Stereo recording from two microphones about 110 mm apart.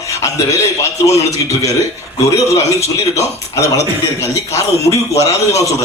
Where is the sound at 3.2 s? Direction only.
30° left (ahead or behind).